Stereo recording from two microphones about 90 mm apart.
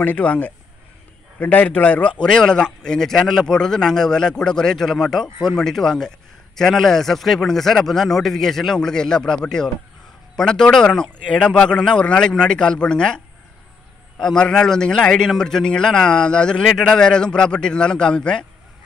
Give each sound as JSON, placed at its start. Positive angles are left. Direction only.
{"t": 0.0, "sound": "a man's voice", "side_deg": 15}